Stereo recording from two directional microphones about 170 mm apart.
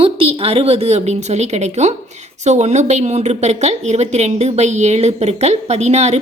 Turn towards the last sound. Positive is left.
turn(degrees=-40)  # may be behind; listen again after turning